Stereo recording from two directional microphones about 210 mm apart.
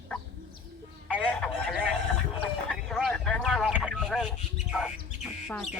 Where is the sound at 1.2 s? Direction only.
5° left (ahead or behind).